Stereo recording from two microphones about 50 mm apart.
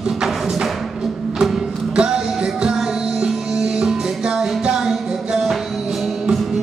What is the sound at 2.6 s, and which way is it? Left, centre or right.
Music, centre.